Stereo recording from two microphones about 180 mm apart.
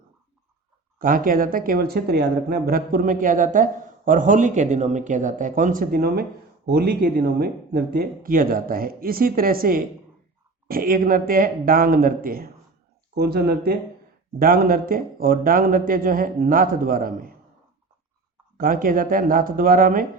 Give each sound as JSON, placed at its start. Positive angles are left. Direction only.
{"t": 0.9, "sound": "speech", "side_deg": -50}
{"t": 18.5, "sound": "speech", "side_deg": -50}